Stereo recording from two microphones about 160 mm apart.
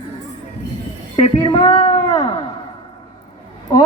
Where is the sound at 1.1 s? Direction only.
25° left (ahead or behind).